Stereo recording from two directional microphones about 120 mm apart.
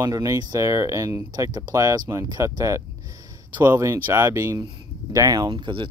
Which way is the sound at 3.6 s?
20° right (ahead or behind).